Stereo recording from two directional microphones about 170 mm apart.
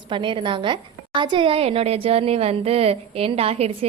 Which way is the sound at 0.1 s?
30° right (ahead or behind).